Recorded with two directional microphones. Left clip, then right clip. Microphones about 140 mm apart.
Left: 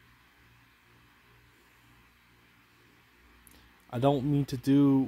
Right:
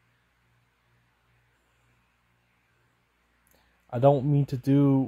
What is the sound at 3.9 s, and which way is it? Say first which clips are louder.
Speech: right 5 dB; 60° right (ahead or behind).